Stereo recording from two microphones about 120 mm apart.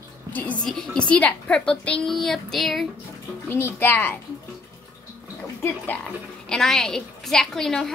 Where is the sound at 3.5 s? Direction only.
15° left (ahead or behind).